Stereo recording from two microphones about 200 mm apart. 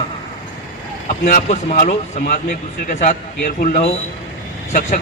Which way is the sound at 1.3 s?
40° left (ahead or behind).